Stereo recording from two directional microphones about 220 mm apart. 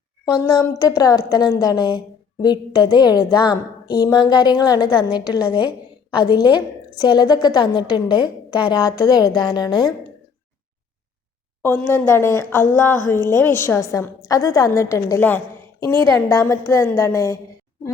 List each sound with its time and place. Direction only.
0.3 s a woman's voice: 20° left (ahead or behind)
11.6 s a woman's voice: 10° left (ahead or behind)